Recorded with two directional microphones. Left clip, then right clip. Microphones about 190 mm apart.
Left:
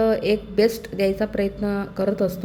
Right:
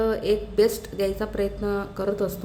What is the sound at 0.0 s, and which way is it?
A woman's voice, 15° left (ahead or behind).